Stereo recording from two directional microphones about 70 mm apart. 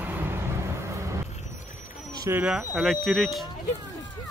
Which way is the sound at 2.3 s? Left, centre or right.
Right.